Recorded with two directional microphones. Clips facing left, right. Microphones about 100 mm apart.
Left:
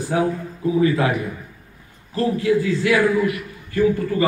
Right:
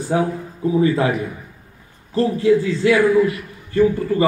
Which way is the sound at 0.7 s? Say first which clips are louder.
Right 1 dB; 30° right (ahead or behind).